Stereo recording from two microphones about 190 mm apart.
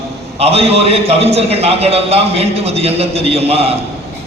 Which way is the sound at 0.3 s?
30° right (ahead or behind).